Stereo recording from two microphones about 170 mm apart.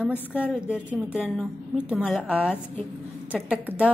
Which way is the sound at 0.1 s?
10° left (ahead or behind).